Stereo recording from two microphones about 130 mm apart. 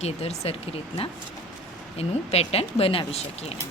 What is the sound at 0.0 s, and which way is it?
Speech, 55° left (ahead or behind).